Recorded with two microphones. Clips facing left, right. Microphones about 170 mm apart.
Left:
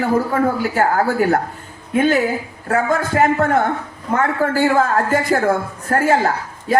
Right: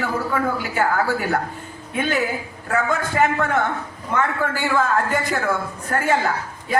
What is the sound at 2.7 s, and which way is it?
A woman's voice, 40° left (ahead or behind).